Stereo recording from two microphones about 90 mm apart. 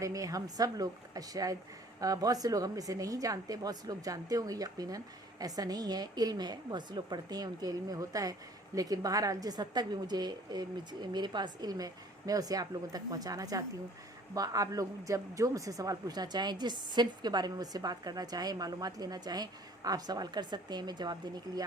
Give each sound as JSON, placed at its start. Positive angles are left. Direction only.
{"t": 0.0, "sound": "a woman's voice", "side_deg": -40}